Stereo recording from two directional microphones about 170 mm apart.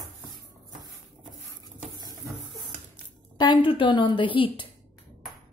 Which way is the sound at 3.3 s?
25° left (ahead or behind).